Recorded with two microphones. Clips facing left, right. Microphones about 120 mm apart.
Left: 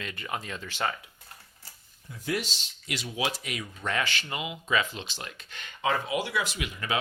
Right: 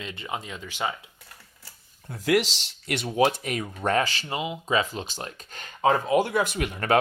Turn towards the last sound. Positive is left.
turn(degrees=-55)  # may be behind; listen again after turning